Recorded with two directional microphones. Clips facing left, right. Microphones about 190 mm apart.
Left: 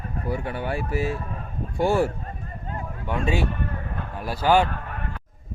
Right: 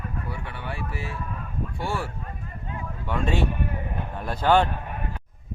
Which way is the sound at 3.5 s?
15° right (ahead or behind).